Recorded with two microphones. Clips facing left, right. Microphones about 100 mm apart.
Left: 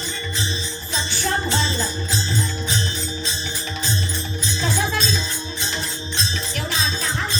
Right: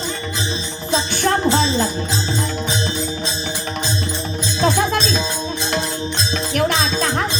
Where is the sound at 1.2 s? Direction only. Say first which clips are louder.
Right 6 dB; 55° right (ahead or behind).